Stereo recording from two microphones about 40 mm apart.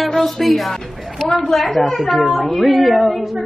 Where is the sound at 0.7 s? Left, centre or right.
Centre.